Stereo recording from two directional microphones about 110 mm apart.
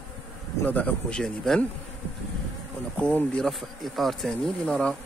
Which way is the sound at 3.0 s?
10° left (ahead or behind).